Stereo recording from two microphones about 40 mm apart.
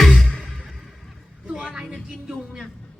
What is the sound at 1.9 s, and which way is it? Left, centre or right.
Music, centre.